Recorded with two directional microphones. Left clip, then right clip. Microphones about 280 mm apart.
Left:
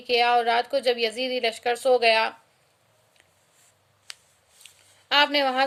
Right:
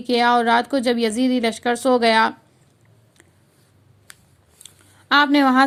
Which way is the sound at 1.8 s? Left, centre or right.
Centre.